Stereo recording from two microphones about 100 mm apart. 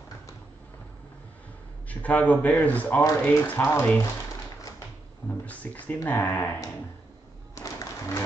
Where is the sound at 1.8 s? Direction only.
15° left (ahead or behind).